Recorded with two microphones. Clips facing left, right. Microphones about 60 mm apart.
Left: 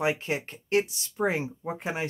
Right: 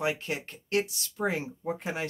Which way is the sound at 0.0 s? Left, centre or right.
Left.